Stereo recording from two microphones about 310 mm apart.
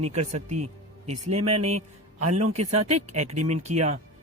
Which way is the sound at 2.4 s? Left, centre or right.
Right.